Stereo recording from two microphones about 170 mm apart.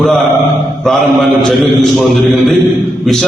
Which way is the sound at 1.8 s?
Centre (ahead or behind).